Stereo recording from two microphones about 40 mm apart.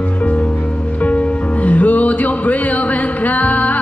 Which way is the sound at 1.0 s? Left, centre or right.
Left.